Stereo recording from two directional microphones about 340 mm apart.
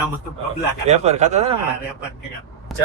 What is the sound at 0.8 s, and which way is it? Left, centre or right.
Speech, centre.